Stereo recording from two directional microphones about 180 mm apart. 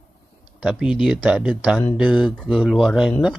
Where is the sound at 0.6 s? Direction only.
5° right (ahead or behind).